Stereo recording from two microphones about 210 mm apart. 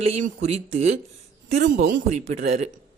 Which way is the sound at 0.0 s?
30° right (ahead or behind).